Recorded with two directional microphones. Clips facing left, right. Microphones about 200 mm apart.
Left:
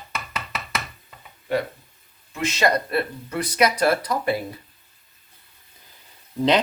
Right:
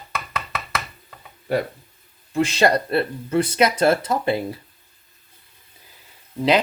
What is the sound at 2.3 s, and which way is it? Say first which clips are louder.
Speech: right 4 dB; 30° right (ahead or behind).